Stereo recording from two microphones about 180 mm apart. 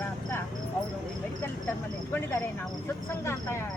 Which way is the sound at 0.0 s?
15° left (ahead or behind).